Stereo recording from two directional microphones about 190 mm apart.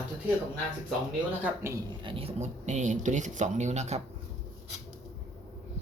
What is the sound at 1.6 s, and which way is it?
Speech, 15° right (ahead or behind).